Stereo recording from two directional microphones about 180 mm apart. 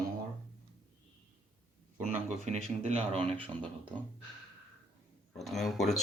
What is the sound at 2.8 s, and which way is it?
Speech, 35° right (ahead or behind).